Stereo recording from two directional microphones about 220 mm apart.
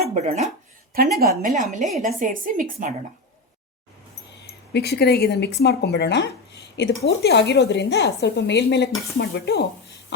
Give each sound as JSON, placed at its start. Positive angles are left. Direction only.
{"t": 0.0, "sound": "a woman's voice", "side_deg": -30}
{"t": 4.7, "sound": "speech", "side_deg": 45}